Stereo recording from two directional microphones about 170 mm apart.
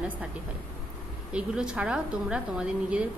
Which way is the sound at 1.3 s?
5° right (ahead or behind).